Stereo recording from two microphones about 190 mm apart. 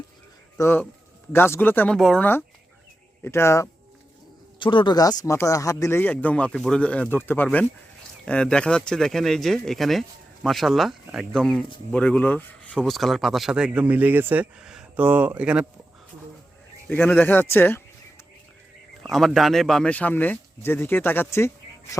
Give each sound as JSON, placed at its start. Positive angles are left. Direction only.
{"t": 0.5, "sound": "speech", "side_deg": 10}
{"t": 4.6, "sound": "speech", "side_deg": 25}
{"t": 16.9, "sound": "speech", "side_deg": 10}
{"t": 19.0, "sound": "speech", "side_deg": 0}